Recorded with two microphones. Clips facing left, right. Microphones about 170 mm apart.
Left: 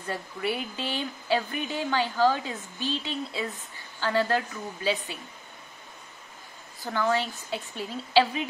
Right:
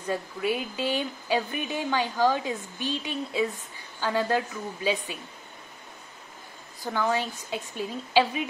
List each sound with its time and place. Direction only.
0.1 s speech: 10° right (ahead or behind)
6.8 s speech: 10° right (ahead or behind)